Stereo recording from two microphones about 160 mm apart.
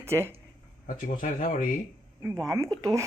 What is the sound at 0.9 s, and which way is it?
Speech, 60° left (ahead or behind).